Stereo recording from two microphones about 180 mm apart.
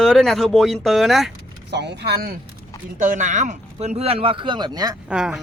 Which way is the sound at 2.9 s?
45° right (ahead or behind).